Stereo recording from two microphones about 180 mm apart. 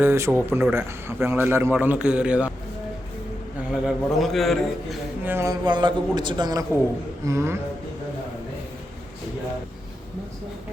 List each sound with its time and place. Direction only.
0.0 s a man's voice: 10° right (ahead or behind)
3.7 s a man's voice: centre (ahead or behind)
5.2 s a man's voice: 15° right (ahead or behind)
5.6 s a man's voice: 25° right (ahead or behind)